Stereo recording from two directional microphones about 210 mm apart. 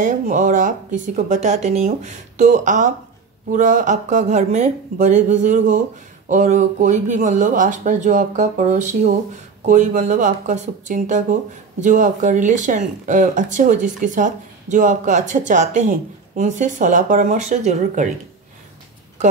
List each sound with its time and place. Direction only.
0.0 s speech: 35° right (ahead or behind)